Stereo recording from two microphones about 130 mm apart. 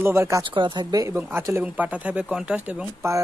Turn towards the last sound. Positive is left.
turn(degrees=-10)  # may be behind; listen again after turning